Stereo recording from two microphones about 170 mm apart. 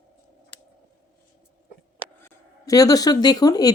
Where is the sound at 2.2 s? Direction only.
20° left (ahead or behind).